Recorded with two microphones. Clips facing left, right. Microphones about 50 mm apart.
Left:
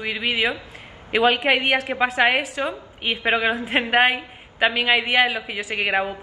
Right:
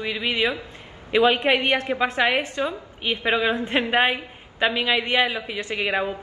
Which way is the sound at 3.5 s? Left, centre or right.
Centre.